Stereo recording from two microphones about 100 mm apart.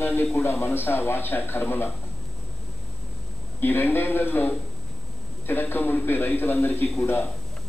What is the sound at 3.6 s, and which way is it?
A man's voice, 20° left (ahead or behind).